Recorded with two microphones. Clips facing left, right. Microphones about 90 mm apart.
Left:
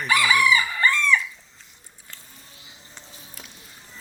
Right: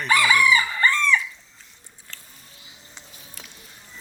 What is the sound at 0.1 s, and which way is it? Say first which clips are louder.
Crowing: right 1 dB; 40° right (ahead or behind).